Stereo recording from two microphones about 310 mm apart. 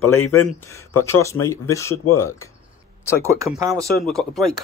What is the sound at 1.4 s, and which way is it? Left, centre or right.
Speech, centre.